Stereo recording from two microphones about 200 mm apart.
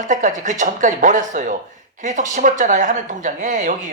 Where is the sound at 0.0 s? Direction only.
40° right (ahead or behind).